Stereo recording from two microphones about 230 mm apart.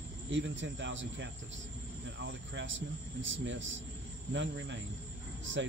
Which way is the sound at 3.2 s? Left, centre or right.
Right.